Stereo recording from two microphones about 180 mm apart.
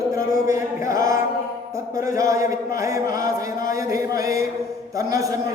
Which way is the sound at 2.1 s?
20° right (ahead or behind).